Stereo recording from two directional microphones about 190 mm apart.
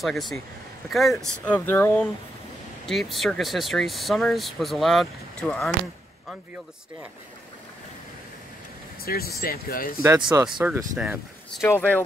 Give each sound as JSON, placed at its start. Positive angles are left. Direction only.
{"t": 0.0, "sound": "speech", "side_deg": 0}
{"t": 2.9, "sound": "speech", "side_deg": 0}
{"t": 9.0, "sound": "speech", "side_deg": 55}
{"t": 10.0, "sound": "speech", "side_deg": -10}
{"t": 11.6, "sound": "speech", "side_deg": 10}